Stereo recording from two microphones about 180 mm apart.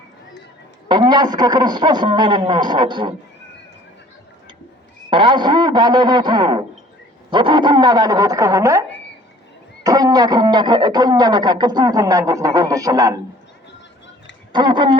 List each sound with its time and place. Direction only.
0.9 s speech: 25° right (ahead or behind)
5.1 s speech: 25° right (ahead or behind)
14.5 s speech: 25° right (ahead or behind)